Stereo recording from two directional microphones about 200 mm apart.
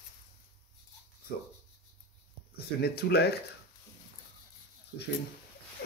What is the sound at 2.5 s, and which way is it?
Speech, 50° left (ahead or behind).